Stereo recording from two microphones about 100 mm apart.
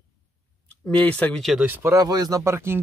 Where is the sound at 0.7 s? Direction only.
15° left (ahead or behind).